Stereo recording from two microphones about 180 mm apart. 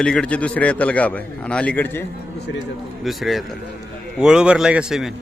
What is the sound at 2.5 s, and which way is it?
Speech, 90° left.